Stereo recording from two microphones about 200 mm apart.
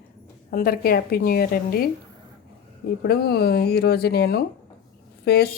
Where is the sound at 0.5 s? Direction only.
50° left (ahead or behind).